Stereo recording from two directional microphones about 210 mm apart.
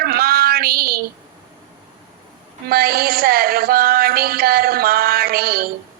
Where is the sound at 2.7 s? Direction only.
45° right (ahead or behind).